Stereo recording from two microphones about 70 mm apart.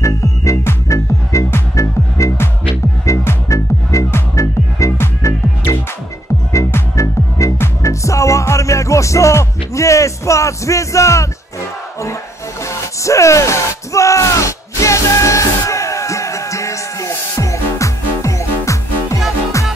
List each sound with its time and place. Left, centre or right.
0.0 s music: left
12.6 s music: left